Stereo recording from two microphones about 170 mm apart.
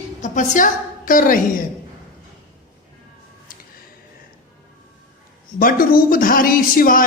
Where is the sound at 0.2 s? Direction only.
50° left (ahead or behind).